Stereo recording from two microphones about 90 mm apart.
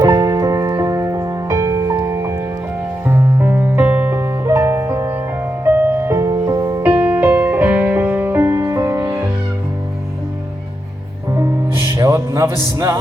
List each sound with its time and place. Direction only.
0.0 s music: 40° right (ahead or behind)
6.8 s music: 25° right (ahead or behind)
8.5 s music: 35° right (ahead or behind)
11.3 s music: 30° right (ahead or behind)